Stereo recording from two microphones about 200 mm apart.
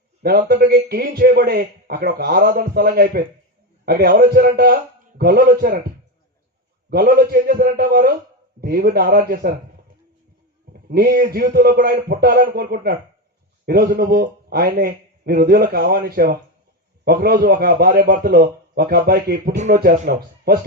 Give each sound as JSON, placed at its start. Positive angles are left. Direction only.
{"t": 0.2, "sound": "a man's voice", "side_deg": -50}
{"t": 6.9, "sound": "a man's voice", "side_deg": -50}
{"t": 10.8, "sound": "a man's voice", "side_deg": -50}
{"t": 20.1, "sound": "chopping", "side_deg": -50}